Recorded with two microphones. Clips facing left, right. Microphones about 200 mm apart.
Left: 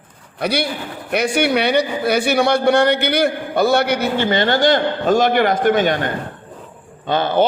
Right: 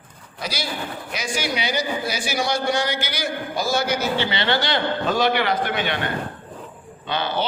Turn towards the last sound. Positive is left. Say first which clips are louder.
# left 8 dB
turn(degrees=50)  # may be behind; listen again after turning